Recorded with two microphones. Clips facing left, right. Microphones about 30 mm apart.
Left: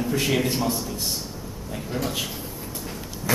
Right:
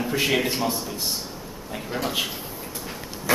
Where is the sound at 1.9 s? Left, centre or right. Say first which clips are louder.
Right 2 dB; centre.